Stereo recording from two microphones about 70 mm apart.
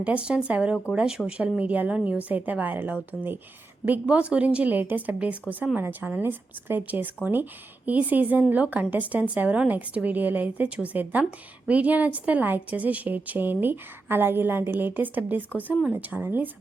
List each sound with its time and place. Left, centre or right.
0.0 s a woman's voice: centre